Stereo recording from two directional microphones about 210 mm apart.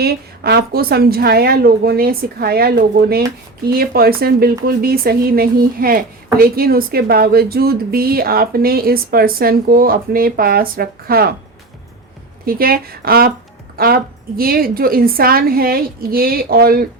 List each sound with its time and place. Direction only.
0.0 s speech: 50° right (ahead or behind)
12.5 s speech: 45° right (ahead or behind)